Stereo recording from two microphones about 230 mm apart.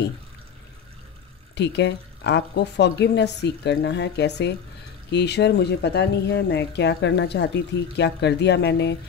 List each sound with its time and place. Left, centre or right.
1.5 s speech: left